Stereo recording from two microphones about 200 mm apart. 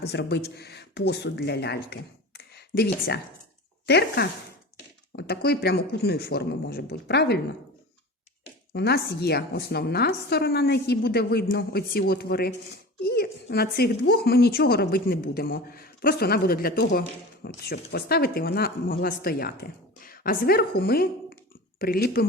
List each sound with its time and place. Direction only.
0.0 s a woman's voice: 55° left (ahead or behind)
8.7 s a woman's voice: 55° left (ahead or behind)